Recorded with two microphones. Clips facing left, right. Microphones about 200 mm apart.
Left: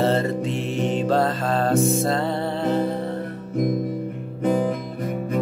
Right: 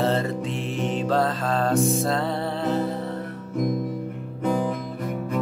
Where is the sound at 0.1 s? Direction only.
Centre (ahead or behind).